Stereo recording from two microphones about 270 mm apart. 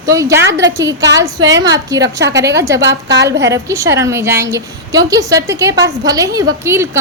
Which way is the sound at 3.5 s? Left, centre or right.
Centre.